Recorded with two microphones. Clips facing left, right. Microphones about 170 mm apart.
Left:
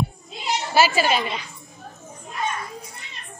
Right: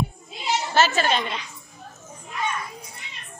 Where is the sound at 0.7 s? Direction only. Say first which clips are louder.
Left 2 dB; 10° left (ahead or behind).